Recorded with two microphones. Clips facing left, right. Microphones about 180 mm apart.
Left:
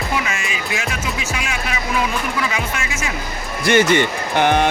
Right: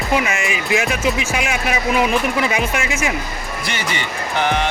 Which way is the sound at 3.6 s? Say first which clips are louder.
Left 13 dB; 50° left (ahead or behind).